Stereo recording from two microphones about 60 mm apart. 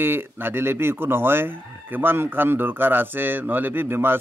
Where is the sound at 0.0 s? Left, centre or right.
Right.